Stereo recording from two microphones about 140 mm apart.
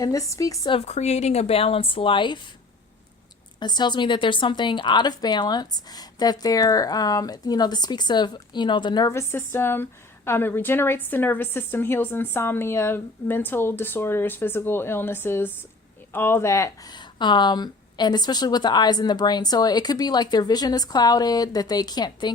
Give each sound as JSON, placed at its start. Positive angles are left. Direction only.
{"t": 0.0, "sound": "speech", "side_deg": 25}
{"t": 0.7, "sound": "speech", "side_deg": 45}
{"t": 3.6, "sound": "speech", "side_deg": 30}
{"t": 9.1, "sound": "a woman's voice", "side_deg": 15}